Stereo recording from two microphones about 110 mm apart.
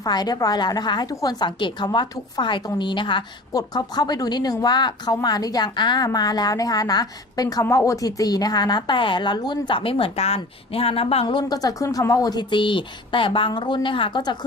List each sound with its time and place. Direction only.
0.0 s a woman's voice: 40° left (ahead or behind)